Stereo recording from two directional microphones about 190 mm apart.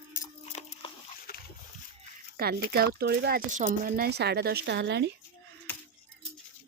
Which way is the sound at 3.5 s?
40° right (ahead or behind).